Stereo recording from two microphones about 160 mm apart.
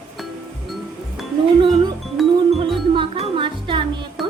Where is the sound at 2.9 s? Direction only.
30° right (ahead or behind).